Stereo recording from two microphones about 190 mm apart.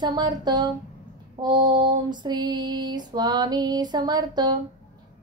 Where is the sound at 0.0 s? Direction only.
25° right (ahead or behind).